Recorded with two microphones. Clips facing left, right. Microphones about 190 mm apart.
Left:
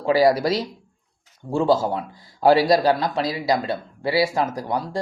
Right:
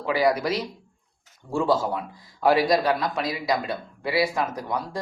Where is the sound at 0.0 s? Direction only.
30° left (ahead or behind).